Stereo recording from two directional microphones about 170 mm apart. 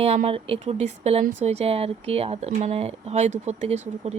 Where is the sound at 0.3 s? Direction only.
35° right (ahead or behind).